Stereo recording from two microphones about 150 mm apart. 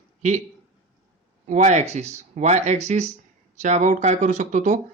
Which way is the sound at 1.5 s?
50° right (ahead or behind).